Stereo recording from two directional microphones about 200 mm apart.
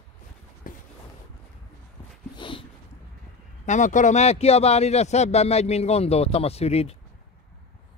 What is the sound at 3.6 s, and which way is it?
Speech, 40° left (ahead or behind).